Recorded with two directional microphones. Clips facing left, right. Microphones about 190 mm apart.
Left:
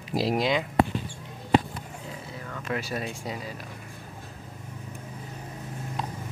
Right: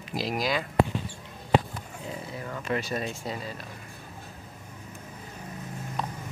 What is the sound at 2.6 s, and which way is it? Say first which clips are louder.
Speech: right 1 dB; 5° left (ahead or behind).